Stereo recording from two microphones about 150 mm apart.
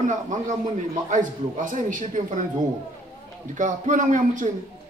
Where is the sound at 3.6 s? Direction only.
55° right (ahead or behind).